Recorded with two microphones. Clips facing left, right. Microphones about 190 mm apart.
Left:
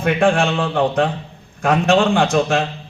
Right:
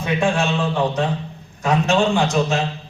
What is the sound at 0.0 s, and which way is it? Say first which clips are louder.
A man's voice: left 4 dB; 55° left (ahead or behind).